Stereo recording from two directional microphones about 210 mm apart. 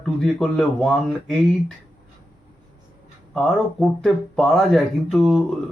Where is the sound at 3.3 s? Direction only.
Centre (ahead or behind).